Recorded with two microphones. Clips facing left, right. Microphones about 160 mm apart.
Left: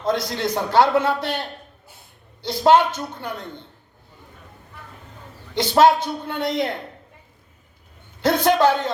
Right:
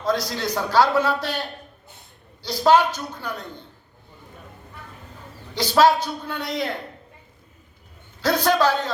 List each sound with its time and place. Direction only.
0.0 s a man's voice: 25° left (ahead or behind)
5.5 s a man's voice: 25° left (ahead or behind)
8.2 s a man's voice: 25° left (ahead or behind)